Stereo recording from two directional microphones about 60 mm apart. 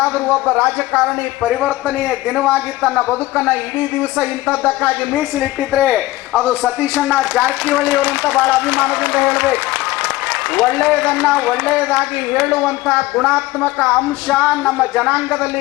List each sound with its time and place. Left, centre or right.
0.4 s a man's voice: centre
3.3 s speech: right
6.4 s a man's voice: right
10.7 s speech: centre
13.1 s speech: centre
14.3 s speech: right
14.7 s a man's voice: centre